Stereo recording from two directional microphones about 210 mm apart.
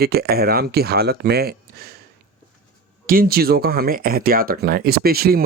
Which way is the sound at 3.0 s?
45° right (ahead or behind).